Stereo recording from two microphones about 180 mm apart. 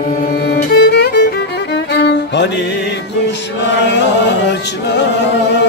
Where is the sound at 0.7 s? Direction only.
65° left (ahead or behind).